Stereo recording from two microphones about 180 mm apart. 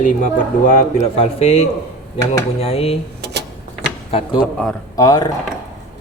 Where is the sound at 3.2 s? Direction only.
65° right (ahead or behind).